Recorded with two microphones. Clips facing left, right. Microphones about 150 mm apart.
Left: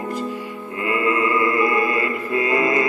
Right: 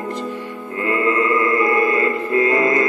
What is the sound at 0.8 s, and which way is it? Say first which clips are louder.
Music: right 2 dB; 10° left (ahead or behind).